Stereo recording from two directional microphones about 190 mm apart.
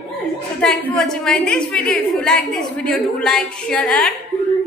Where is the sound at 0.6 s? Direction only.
5° left (ahead or behind).